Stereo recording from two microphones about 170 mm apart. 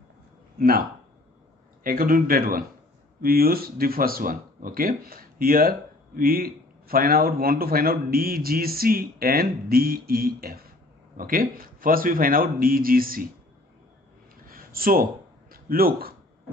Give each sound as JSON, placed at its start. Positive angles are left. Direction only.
{"t": 0.6, "sound": "speech", "side_deg": -60}
{"t": 14.4, "sound": "a sound", "side_deg": -60}
{"t": 15.5, "sound": "speech", "side_deg": -60}